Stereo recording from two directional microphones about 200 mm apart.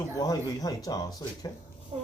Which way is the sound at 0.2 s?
20° left (ahead or behind).